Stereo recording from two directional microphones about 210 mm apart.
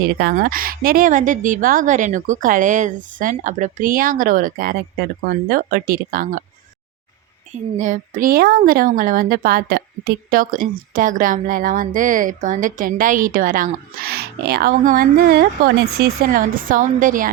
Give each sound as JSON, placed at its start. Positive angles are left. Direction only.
{"t": 0.2, "sound": "a woman's voice", "side_deg": -45}
{"t": 7.8, "sound": "a woman's voice", "side_deg": -35}